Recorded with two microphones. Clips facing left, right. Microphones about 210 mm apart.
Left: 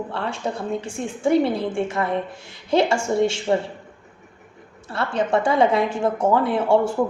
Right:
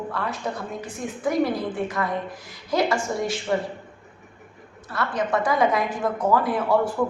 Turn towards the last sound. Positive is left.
turn(degrees=25)  # may be behind; listen again after turning